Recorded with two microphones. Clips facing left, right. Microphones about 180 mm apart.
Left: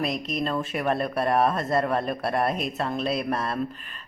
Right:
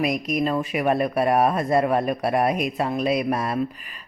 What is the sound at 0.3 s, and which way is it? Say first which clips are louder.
Speech: right 4 dB; 10° right (ahead or behind).